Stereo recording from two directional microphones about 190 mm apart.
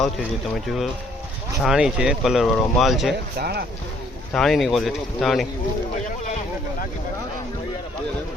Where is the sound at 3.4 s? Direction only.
55° right (ahead or behind).